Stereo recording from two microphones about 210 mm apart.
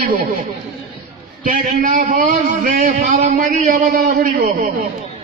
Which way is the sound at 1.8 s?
40° right (ahead or behind).